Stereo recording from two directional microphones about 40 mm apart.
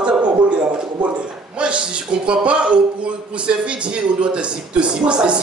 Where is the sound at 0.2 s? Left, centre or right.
Right.